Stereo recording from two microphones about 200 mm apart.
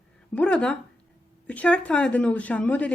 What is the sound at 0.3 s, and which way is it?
A woman's voice, 5° left (ahead or behind).